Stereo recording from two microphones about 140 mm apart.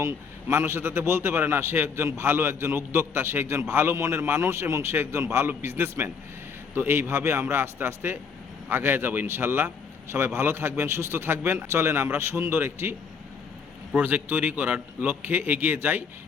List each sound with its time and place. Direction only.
0.0 s a man's voice: 20° right (ahead or behind)